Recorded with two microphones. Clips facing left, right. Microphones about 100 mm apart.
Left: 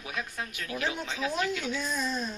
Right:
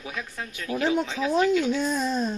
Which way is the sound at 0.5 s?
30° right (ahead or behind).